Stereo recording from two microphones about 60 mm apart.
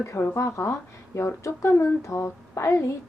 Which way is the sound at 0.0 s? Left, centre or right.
Left.